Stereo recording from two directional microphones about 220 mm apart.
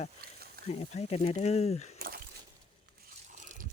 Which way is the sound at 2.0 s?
45° right (ahead or behind).